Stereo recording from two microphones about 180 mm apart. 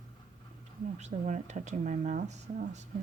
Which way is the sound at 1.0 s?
40° right (ahead or behind).